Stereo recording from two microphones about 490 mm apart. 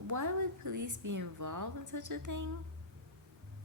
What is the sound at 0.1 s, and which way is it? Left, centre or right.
Speech, right.